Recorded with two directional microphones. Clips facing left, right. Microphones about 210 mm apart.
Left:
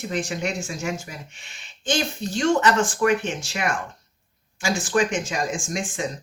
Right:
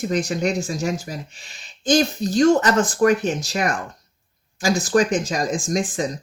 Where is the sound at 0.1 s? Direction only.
40° right (ahead or behind).